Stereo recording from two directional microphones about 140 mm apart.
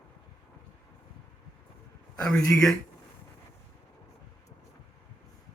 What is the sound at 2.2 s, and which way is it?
Speech, 25° left (ahead or behind).